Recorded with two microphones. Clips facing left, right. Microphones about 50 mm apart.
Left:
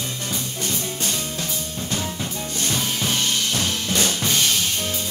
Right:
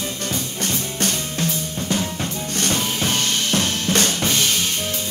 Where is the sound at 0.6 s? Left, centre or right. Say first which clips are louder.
Right 4 dB; right.